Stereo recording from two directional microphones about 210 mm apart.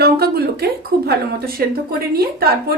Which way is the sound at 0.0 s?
50° right (ahead or behind).